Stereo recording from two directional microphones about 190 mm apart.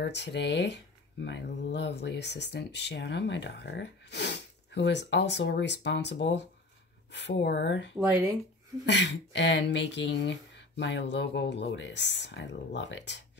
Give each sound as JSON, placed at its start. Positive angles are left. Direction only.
{"t": 0.0, "sound": "speech", "side_deg": 65}